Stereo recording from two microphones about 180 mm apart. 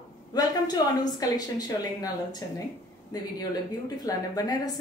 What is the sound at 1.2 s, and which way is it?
A woman's voice, 20° left (ahead or behind).